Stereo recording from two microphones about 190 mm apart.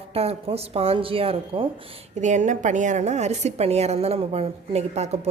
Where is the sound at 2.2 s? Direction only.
40° right (ahead or behind).